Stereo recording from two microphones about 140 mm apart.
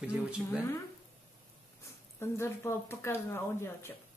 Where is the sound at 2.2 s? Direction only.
20° left (ahead or behind).